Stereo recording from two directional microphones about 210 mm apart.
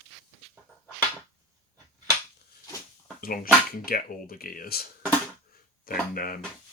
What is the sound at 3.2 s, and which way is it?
Speech, 45° left (ahead or behind).